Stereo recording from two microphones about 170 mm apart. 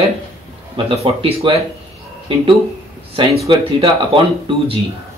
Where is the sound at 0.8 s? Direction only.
35° right (ahead or behind).